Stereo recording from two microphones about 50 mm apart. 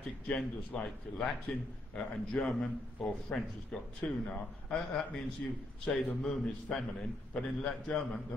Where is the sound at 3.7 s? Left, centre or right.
Centre.